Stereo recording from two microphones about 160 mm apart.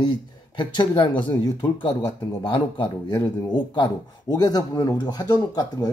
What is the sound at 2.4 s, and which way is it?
Speech, 30° left (ahead or behind).